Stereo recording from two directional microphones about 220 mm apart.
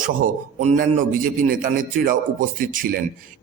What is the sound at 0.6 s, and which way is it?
A man's voice, 35° right (ahead or behind).